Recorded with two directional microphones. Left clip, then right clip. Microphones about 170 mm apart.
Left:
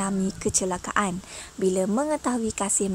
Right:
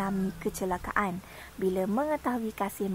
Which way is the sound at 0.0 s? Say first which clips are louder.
Left 4 dB; 25° left (ahead or behind).